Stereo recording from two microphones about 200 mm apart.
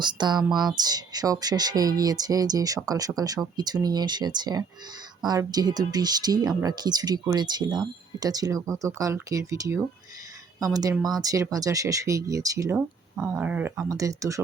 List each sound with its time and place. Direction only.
0.0 s speech: 20° right (ahead or behind)